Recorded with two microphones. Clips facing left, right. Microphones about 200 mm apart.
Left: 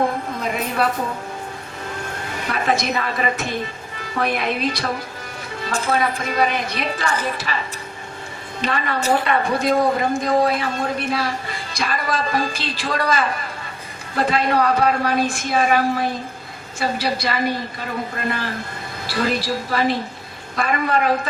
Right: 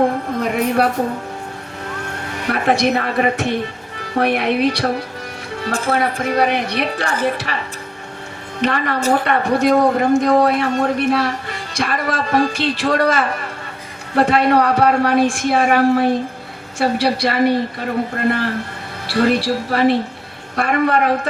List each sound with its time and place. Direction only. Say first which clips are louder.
0.3 s a sound: right 8 dB; 65° right (ahead or behind)
2.5 s a woman's voice: right 5 dB; 65° right (ahead or behind)
8.6 s a woman's voice: right 4 dB; 65° right (ahead or behind)